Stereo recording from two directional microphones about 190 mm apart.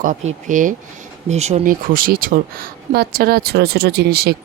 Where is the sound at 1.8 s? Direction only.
50° right (ahead or behind).